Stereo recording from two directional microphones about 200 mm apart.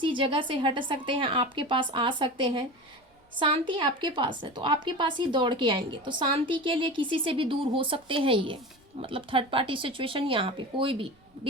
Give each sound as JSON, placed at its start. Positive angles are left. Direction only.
{"t": 0.0, "sound": "a woman's voice", "side_deg": -25}